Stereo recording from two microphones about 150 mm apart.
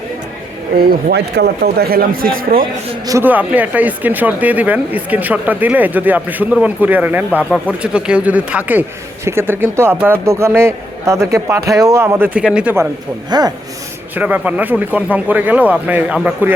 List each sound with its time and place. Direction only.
0.8 s a man's voice: 90° right
3.1 s speech: 15° right (ahead or behind)
13.3 s speech: 25° right (ahead or behind)
14.2 s speech: 10° right (ahead or behind)